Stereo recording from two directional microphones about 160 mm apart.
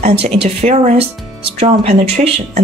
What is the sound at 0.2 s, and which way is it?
Speech, 40° right (ahead or behind).